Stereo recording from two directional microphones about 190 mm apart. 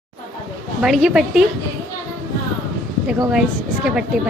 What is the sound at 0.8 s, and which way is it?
Speech, centre (ahead or behind).